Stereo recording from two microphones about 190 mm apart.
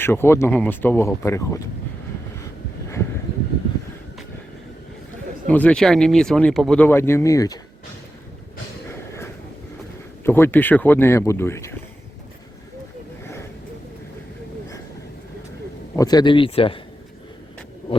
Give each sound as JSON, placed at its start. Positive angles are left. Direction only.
{"t": 0.0, "sound": "speech", "side_deg": 10}
{"t": 5.5, "sound": "speech", "side_deg": 5}
{"t": 10.2, "sound": "speech", "side_deg": 10}
{"t": 16.0, "sound": "speech", "side_deg": 20}